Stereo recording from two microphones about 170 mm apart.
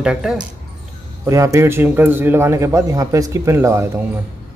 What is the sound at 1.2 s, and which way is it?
A man's voice, 15° right (ahead or behind).